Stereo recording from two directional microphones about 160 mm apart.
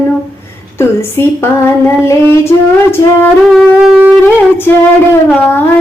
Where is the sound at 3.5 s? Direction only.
5° right (ahead or behind).